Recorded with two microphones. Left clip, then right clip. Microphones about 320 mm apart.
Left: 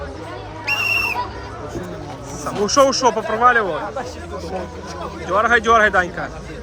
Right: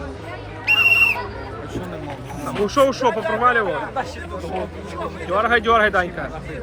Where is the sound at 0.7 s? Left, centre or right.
Right.